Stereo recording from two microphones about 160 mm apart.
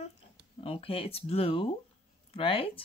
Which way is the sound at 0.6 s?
35° left (ahead or behind).